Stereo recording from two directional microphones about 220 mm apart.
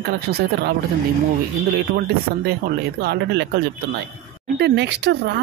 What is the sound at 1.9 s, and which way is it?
Speech, 45° right (ahead or behind).